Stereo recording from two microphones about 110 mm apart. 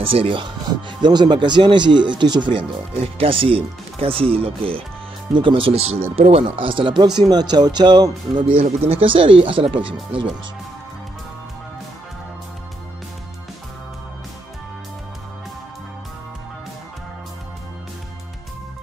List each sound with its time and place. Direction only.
0.0 s speech: 60° right (ahead or behind)
7.2 s speech: 40° right (ahead or behind)
8.5 s speech: 65° right (ahead or behind)